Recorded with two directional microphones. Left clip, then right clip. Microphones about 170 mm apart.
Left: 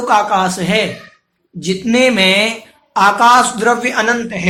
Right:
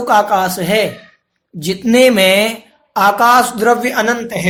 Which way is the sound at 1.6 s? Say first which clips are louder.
Right 3 dB; 50° right (ahead or behind).